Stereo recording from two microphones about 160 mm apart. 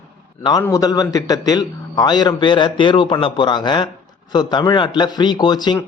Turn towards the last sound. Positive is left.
turn(degrees=25)  # may be behind; listen again after turning